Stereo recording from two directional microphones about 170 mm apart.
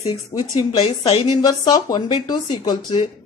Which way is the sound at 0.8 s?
35° left (ahead or behind).